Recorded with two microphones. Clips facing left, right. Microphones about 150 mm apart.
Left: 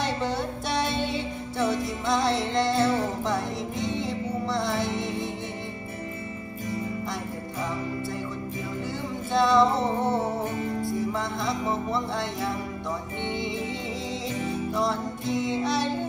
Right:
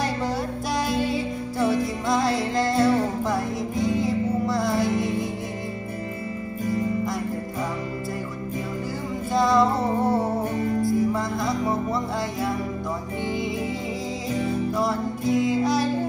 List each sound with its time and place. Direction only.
0.7 s music: centre (ahead or behind)
4.9 s music: 25° left (ahead or behind)
9.3 s music: centre (ahead or behind)
14.7 s music: 5° right (ahead or behind)